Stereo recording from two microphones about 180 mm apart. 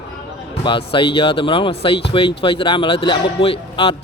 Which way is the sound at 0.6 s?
30° left (ahead or behind).